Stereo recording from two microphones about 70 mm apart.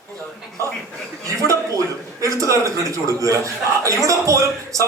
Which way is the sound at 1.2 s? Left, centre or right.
Right.